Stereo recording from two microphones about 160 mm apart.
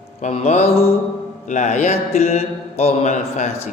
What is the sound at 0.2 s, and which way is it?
Mantra, 40° left (ahead or behind).